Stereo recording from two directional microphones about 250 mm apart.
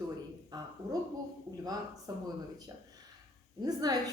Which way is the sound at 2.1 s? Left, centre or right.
Centre.